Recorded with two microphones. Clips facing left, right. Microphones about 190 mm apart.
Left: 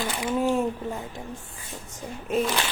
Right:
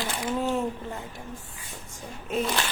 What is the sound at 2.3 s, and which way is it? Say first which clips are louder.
Speech: left 3 dB; centre (ahead or behind).